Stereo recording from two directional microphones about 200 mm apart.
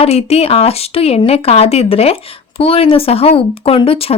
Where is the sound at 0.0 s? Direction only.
30° left (ahead or behind).